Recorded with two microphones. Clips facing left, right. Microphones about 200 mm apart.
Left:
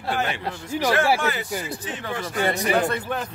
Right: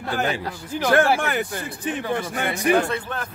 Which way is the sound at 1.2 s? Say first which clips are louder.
Right 1 dB; 55° right (ahead or behind).